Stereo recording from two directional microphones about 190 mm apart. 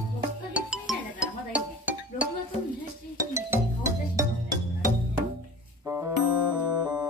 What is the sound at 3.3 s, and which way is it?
Music, 15° right (ahead or behind).